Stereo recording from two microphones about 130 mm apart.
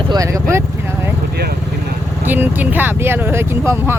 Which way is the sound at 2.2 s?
15° right (ahead or behind).